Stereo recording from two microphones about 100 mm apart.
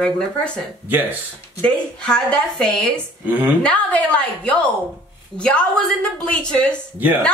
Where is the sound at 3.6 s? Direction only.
15° left (ahead or behind).